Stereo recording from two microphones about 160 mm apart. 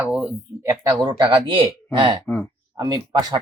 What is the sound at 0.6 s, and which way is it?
Speech, 20° right (ahead or behind).